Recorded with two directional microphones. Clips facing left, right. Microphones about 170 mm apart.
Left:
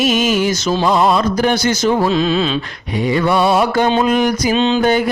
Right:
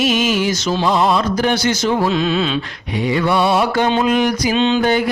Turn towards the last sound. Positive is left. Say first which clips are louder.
# left 1 dB
turn(degrees=45)  # may be behind; listen again after turning